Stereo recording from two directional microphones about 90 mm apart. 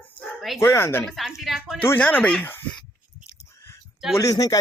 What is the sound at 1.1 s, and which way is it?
Speech, 5° right (ahead or behind).